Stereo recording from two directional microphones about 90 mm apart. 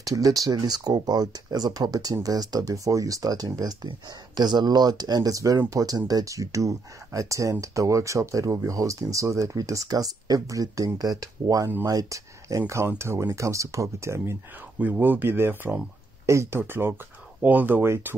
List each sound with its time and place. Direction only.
0.0 s speech: 40° right (ahead or behind)
14.8 s speech: 20° right (ahead or behind)